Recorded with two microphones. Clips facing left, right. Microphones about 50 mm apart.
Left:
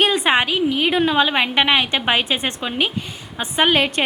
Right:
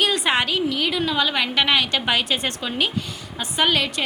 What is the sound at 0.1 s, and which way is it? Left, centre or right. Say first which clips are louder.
A woman's voice: left 3 dB; left.